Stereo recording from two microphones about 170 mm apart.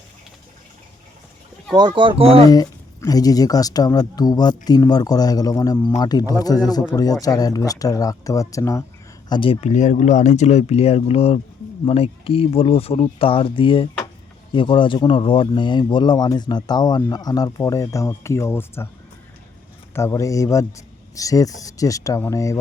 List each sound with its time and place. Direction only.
1.7 s speech: 25° right (ahead or behind)
2.5 s speech: 20° left (ahead or behind)
9.3 s speech: 30° left (ahead or behind)
9.6 s speech: 45° left (ahead or behind); by 18.9 s 15° left (ahead or behind)
19.9 s speech: 15° left (ahead or behind)